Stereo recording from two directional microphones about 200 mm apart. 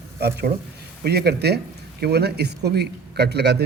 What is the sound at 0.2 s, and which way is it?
A man's voice, 55° right (ahead or behind).